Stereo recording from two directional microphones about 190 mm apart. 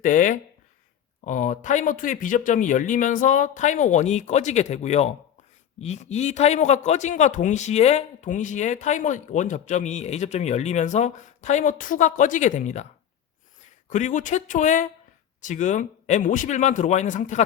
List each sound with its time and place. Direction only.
0.0 s a man's voice: 45° left (ahead or behind)
13.9 s a man's voice: 40° left (ahead or behind)